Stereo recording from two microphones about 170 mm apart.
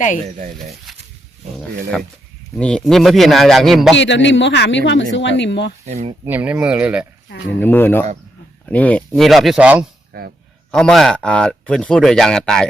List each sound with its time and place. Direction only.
0.9 s wild animals: centre (ahead or behind)
1.9 s speech: 5° left (ahead or behind)
3.9 s speech: 90° left
5.8 s speech: 40° right (ahead or behind)
6.2 s speech: 10° right (ahead or behind)
7.6 s speech: 10° left (ahead or behind); by 9.8 s 5° right (ahead or behind)
10.1 s speech: 65° right (ahead or behind)
10.7 s speech: 5° left (ahead or behind)